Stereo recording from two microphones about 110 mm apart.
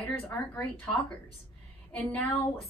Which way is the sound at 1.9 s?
10° left (ahead or behind).